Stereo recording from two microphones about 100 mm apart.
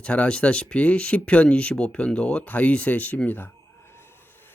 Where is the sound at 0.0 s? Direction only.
10° left (ahead or behind).